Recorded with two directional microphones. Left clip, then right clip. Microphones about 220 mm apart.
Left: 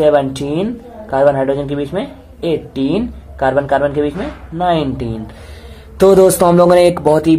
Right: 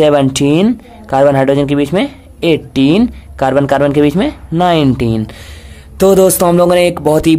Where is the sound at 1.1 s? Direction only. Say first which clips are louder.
Right 3 dB; 40° right (ahead or behind).